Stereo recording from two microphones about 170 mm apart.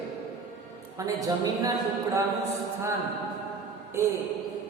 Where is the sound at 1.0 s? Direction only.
20° right (ahead or behind).